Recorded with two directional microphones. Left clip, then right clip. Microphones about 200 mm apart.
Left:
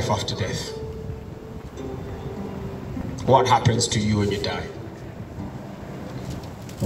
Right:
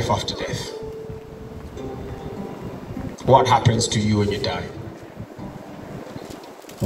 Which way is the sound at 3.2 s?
20° left (ahead or behind).